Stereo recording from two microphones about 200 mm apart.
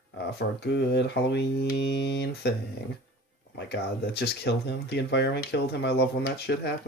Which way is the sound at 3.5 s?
55° left (ahead or behind).